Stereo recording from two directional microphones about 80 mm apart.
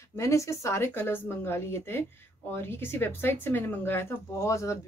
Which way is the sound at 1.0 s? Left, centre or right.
Left.